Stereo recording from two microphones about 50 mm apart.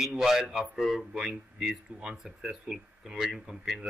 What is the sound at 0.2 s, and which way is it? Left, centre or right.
A man's voice, centre.